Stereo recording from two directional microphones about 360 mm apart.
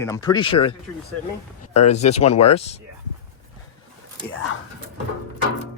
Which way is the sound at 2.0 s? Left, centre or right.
Centre.